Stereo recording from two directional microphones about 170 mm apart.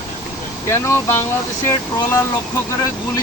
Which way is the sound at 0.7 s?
15° left (ahead or behind).